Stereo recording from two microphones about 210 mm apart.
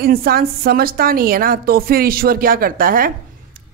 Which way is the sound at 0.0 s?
45° right (ahead or behind).